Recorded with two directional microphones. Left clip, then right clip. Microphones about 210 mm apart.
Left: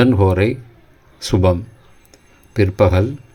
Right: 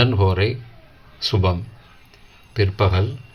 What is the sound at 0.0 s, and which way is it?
Speech, 30° left (ahead or behind).